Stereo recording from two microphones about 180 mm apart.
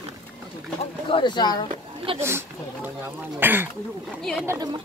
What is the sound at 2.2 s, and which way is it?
Speech, 15° right (ahead or behind).